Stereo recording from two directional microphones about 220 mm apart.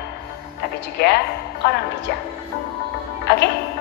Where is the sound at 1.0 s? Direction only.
50° left (ahead or behind).